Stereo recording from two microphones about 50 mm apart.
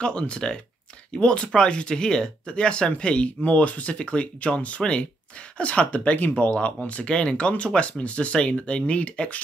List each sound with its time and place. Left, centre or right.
0.0 s speech: left